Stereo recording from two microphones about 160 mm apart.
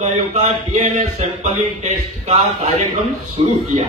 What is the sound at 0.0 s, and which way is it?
A man's voice, 45° right (ahead or behind).